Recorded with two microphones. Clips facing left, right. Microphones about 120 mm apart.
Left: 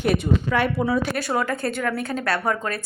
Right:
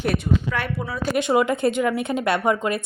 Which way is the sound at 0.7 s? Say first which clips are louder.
Left 8 dB; 15° left (ahead or behind).